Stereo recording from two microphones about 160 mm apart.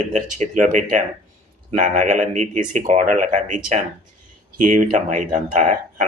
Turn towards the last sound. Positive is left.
turn(degrees=-50)  # may be behind; listen again after turning